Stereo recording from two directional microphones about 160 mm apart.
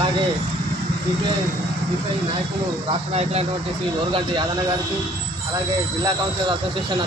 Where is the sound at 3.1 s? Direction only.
40° right (ahead or behind).